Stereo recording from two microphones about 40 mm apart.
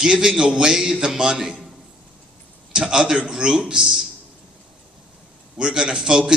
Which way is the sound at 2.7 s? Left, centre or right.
Centre.